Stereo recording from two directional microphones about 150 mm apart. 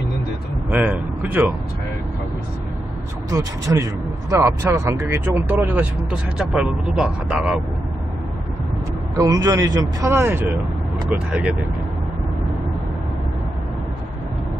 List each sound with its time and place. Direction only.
0.7 s speech: 10° right (ahead or behind)
3.3 s speech: 20° right (ahead or behind)
9.1 s speech: 25° right (ahead or behind)